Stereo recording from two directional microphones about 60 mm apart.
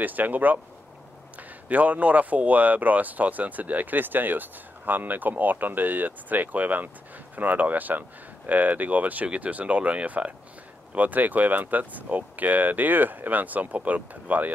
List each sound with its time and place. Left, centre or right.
0.0 s speech: right
1.7 s speech: right